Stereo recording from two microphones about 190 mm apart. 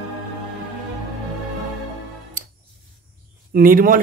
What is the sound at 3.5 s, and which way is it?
Speech, 45° right (ahead or behind).